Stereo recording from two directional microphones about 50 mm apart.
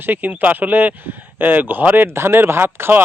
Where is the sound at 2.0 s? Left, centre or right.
Right.